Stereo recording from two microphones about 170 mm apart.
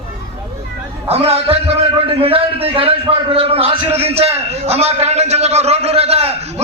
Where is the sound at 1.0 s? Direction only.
35° right (ahead or behind).